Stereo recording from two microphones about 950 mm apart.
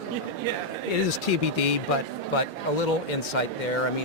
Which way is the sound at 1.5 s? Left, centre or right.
Left.